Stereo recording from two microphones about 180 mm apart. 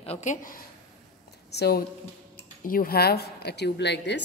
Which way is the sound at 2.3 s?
50° left (ahead or behind).